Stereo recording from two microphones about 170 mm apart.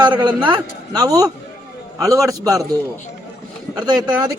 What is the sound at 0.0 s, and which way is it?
A man's voice, 25° right (ahead or behind).